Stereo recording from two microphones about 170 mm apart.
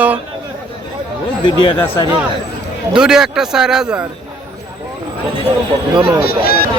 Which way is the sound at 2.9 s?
5° right (ahead or behind).